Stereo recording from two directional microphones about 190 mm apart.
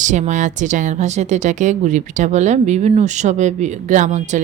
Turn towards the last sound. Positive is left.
turn(degrees=-40)  # may be behind; listen again after turning